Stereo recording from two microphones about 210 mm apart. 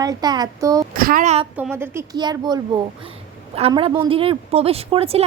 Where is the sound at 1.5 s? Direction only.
10° right (ahead or behind).